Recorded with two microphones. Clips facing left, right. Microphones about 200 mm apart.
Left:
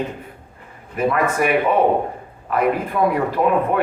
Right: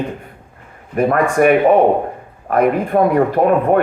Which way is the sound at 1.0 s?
50° right (ahead or behind).